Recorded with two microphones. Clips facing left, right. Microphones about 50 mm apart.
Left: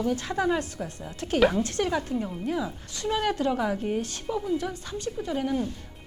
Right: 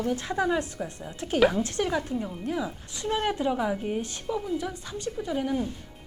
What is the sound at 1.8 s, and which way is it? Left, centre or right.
Speech, centre.